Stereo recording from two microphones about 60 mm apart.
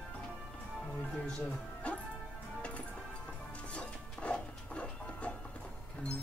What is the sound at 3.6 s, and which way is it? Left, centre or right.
Music, left.